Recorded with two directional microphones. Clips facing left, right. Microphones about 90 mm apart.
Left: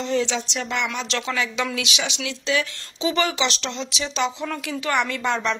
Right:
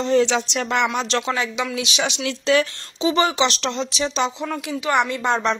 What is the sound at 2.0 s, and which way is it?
Speech, 50° right (ahead or behind).